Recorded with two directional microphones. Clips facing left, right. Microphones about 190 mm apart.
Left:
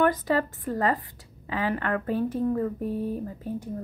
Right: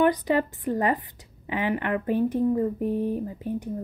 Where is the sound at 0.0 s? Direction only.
15° right (ahead or behind).